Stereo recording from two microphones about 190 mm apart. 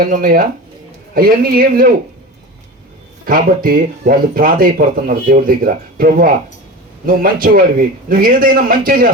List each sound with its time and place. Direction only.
0.0 s speech: 50° right (ahead or behind)
3.2 s speech: 50° right (ahead or behind)